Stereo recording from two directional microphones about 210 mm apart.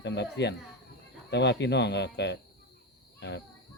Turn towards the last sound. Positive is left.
turn(degrees=55)  # may be behind; listen again after turning